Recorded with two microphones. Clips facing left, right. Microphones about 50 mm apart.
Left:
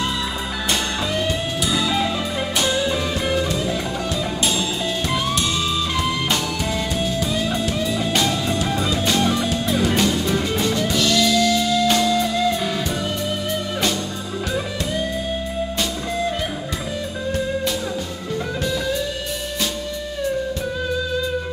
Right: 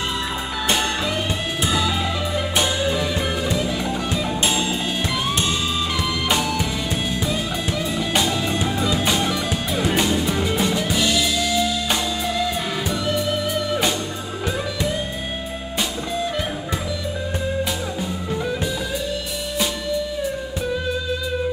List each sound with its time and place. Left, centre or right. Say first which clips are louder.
1.7 s music: even; right
2.5 s music: left 1 dB; right
7.6 s music: left 2 dB; centre